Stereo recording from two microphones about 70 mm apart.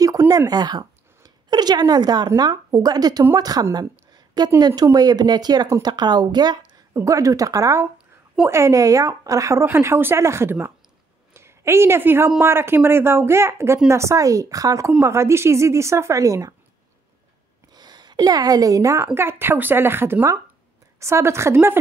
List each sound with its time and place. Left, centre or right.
0.5 s speech: right
3.7 s a sound: right
4.6 s speech: right
6.9 s a woman's voice: right
9.7 s a woman's voice: right
15.0 s a woman's voice: right
17.7 s a woman's voice: right
19.1 s speech: right